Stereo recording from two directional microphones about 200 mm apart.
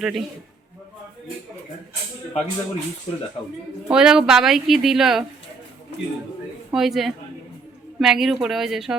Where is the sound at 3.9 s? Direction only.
5° right (ahead or behind).